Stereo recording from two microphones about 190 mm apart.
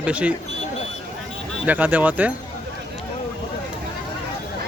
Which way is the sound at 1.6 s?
10° right (ahead or behind).